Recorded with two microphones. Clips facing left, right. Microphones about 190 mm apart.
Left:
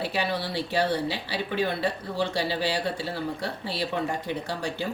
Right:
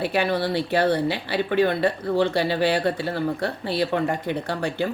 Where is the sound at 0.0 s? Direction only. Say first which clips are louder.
Right 6 dB; 55° right (ahead or behind).